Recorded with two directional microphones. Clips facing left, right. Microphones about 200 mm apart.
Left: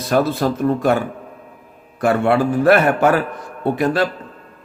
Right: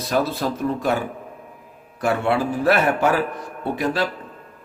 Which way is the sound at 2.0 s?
55° left (ahead or behind).